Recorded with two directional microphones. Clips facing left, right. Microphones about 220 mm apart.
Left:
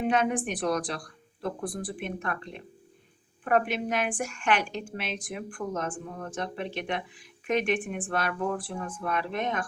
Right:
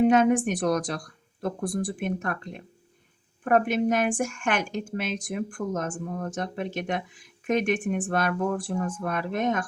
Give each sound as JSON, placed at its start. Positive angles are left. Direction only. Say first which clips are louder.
{"t": 0.1, "sound": "a woman's voice", "louder": "right 6 dB", "side_deg": -45}